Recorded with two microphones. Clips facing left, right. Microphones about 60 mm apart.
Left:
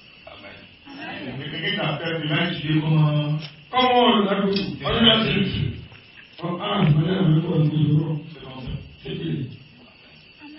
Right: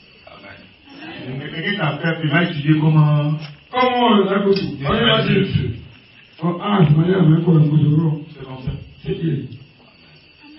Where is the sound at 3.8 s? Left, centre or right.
Centre.